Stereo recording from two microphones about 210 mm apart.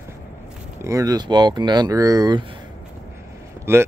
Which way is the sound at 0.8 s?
15° right (ahead or behind).